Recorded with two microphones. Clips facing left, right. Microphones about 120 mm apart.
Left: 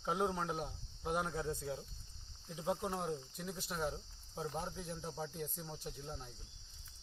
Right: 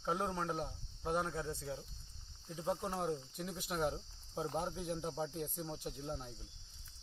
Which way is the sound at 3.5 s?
15° right (ahead or behind).